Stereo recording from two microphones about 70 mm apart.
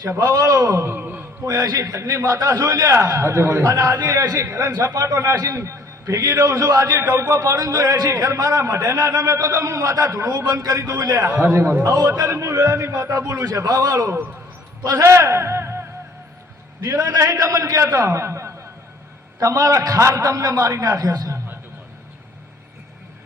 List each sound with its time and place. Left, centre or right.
0.2 s a man's voice: right
0.8 s a man's voice: right
1.5 s a man's voice: right
7.8 s a man's voice: right
10.3 s a man's voice: right
11.0 s a man's voice: right
11.3 s a man's voice: right
11.8 s a man's voice: right
12.3 s a man's voice: right
13.7 s a man's voice: right
15.0 s speech: right
16.8 s a man's voice: right
19.4 s a man's voice: right